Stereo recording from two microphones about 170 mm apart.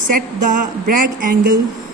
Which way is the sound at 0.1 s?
50° right (ahead or behind).